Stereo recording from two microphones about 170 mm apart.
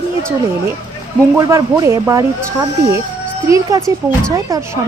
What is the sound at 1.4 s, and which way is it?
A woman's voice, 20° right (ahead or behind).